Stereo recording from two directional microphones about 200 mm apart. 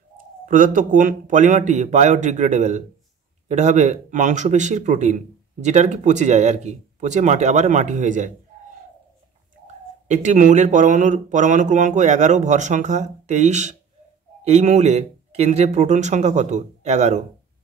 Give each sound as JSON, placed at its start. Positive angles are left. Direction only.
{"t": 0.5, "sound": "speech", "side_deg": -40}
{"t": 10.0, "sound": "speech", "side_deg": -35}